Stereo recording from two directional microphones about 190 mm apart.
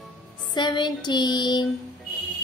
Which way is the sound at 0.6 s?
25° left (ahead or behind).